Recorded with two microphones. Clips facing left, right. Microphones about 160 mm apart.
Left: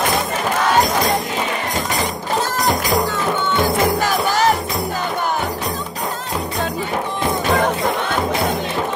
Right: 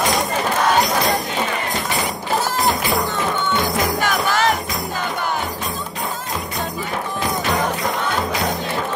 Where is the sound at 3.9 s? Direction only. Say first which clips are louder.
Left 2 dB; 40° left (ahead or behind).